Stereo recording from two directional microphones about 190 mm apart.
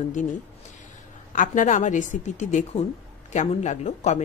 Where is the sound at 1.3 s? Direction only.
45° left (ahead or behind).